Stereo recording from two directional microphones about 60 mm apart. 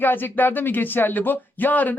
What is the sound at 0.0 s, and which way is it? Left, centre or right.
A woman's voice, left.